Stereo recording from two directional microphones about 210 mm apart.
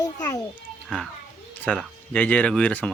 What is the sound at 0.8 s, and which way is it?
A child's voice, centre (ahead or behind).